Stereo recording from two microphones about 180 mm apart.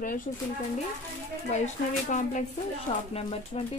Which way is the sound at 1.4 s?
40° left (ahead or behind).